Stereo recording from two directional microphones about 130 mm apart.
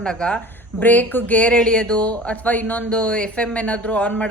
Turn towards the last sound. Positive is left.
turn(degrees=10)  # may be behind; listen again after turning